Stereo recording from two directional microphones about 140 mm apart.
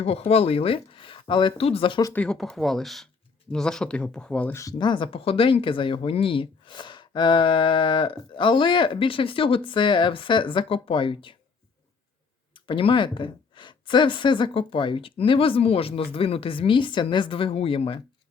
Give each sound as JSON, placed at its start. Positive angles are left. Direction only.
{"t": 0.0, "sound": "speech", "side_deg": 45}
{"t": 2.1, "sound": "speech", "side_deg": 5}
{"t": 4.8, "sound": "speech", "side_deg": 35}
{"t": 12.5, "sound": "speech", "side_deg": 35}